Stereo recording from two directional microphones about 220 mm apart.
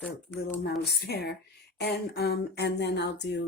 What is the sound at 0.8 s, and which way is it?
Speech, 50° left (ahead or behind).